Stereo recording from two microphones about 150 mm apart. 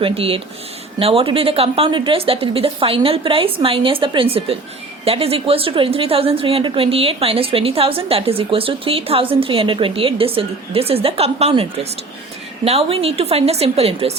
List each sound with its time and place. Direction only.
0.0 s a woman's voice: 40° right (ahead or behind)